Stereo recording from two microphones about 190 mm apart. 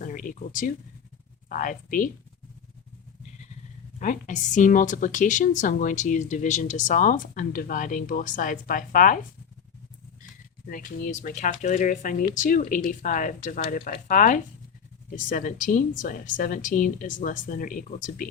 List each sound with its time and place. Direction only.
0.0 s a woman's voice: 45° left (ahead or behind)
4.0 s a woman's voice: 40° left (ahead or behind)
10.7 s a woman's voice: 45° left (ahead or behind)